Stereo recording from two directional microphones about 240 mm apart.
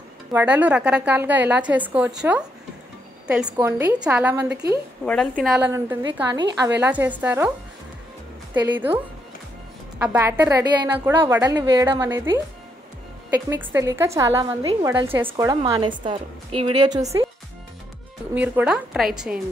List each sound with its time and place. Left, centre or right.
0.3 s a woman's voice: centre
3.5 s a woman's voice: centre
8.7 s a woman's voice: centre
18.3 s a woman's voice: centre